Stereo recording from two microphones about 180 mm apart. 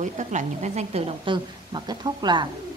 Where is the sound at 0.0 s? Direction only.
40° right (ahead or behind).